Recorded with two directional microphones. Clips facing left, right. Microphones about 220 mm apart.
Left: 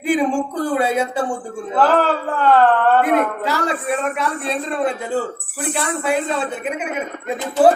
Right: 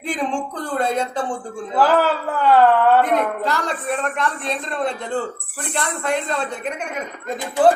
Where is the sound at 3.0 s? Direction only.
10° left (ahead or behind).